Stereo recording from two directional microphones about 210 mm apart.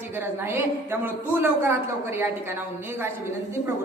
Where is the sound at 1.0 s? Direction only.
10° right (ahead or behind).